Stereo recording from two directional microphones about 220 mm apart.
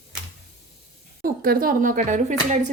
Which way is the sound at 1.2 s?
40° right (ahead or behind).